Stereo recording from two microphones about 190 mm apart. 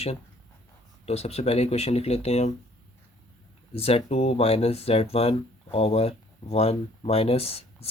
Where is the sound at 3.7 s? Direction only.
30° left (ahead or behind).